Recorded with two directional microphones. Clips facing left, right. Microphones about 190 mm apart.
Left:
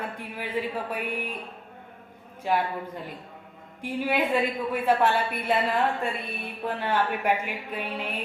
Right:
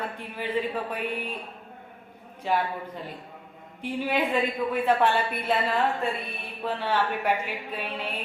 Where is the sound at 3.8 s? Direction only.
10° left (ahead or behind).